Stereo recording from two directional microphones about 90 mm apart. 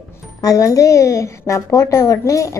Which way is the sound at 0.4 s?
40° left (ahead or behind).